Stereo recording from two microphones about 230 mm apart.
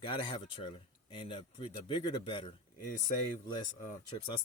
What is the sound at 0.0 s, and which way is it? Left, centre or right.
Speech, left.